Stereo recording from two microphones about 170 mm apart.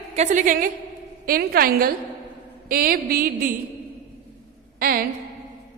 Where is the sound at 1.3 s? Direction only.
60° right (ahead or behind).